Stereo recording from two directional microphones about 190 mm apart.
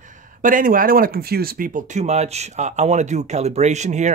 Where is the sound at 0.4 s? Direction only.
45° right (ahead or behind).